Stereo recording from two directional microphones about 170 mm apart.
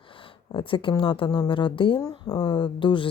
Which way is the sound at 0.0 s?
30° left (ahead or behind).